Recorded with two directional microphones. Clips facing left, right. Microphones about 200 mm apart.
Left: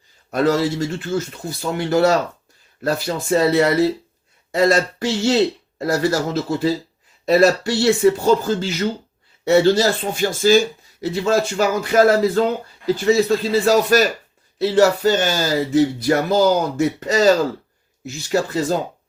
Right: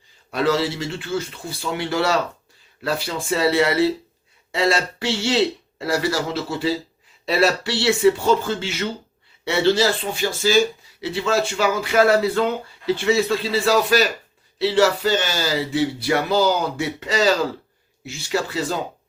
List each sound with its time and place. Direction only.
0.3 s speech: 45° left (ahead or behind)